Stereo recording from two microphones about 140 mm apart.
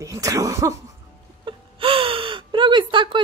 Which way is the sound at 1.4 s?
40° right (ahead or behind).